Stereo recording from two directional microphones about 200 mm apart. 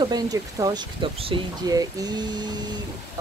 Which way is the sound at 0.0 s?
20° right (ahead or behind).